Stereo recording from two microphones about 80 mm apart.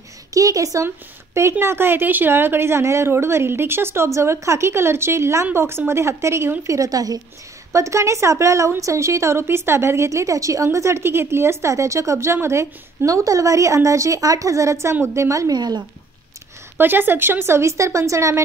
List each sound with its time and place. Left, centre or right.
0.3 s a woman's voice: right
7.7 s a woman's voice: right
15.5 s speech: right
16.7 s a woman's voice: right